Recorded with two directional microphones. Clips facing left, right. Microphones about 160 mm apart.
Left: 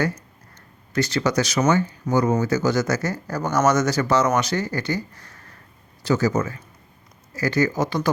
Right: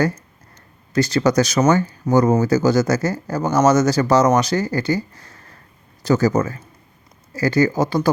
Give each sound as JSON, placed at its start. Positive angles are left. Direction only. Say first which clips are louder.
{"t": 0.9, "sound": "speech", "louder": "right 5 dB", "side_deg": -40}
{"t": 6.0, "sound": "speech", "louder": "right 4 dB", "side_deg": -45}